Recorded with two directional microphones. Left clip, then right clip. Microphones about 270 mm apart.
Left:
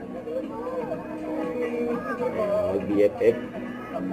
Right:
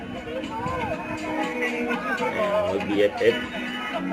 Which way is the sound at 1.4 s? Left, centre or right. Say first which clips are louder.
Right 1 dB; centre.